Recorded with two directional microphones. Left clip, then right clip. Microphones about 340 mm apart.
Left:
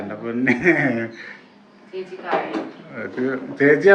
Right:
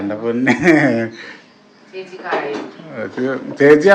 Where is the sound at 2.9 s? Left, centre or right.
Centre.